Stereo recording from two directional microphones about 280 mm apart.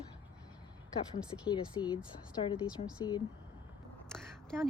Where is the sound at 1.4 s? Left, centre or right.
Centre.